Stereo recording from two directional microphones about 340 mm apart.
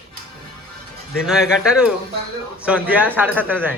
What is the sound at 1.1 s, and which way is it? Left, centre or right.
A man's voice, centre.